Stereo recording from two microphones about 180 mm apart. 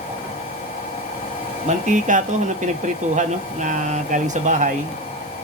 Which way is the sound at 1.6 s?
45° right (ahead or behind).